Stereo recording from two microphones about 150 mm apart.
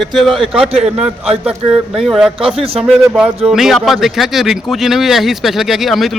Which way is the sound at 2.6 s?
40° right (ahead or behind).